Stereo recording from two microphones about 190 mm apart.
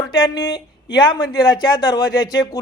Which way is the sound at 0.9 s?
20° left (ahead or behind).